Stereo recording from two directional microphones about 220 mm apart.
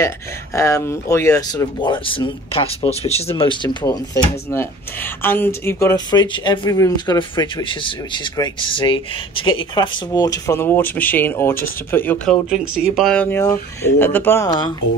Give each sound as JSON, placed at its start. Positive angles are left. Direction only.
{"t": 0.6, "sound": "speech", "side_deg": 15}
{"t": 12.4, "sound": "speech", "side_deg": -5}